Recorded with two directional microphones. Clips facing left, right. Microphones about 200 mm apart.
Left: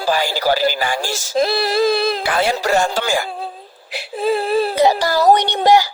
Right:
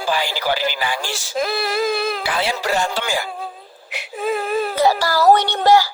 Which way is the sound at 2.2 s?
50° left (ahead or behind).